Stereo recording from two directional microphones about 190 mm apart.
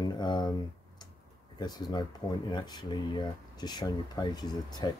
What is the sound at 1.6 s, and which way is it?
Speech, 20° left (ahead or behind).